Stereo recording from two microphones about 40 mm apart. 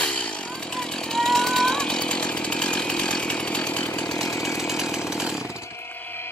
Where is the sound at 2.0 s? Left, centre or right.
Left.